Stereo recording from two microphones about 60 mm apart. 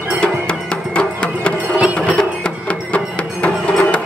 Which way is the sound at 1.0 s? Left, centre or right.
Centre.